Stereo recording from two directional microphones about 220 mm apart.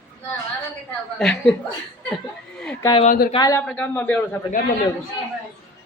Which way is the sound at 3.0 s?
35° left (ahead or behind).